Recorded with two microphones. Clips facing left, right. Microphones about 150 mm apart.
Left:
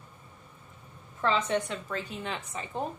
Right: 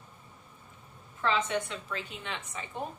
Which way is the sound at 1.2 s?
35° left (ahead or behind).